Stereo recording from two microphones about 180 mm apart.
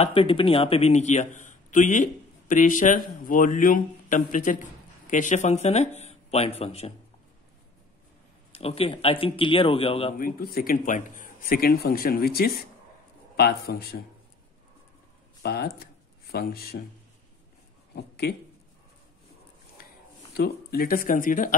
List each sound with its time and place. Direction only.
0.0 s a man's voice: 30° left (ahead or behind)
8.5 s a man's voice: 35° left (ahead or behind)
10.1 s speech: 55° left (ahead or behind)
15.4 s speech: 60° left (ahead or behind)
17.9 s speech: 65° left (ahead or behind)
20.3 s speech: 60° left (ahead or behind)